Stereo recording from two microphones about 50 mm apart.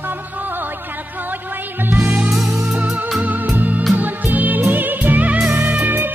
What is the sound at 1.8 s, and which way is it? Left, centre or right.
Music, right.